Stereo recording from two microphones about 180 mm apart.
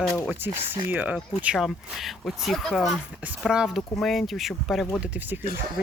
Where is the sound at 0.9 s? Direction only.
10° right (ahead or behind).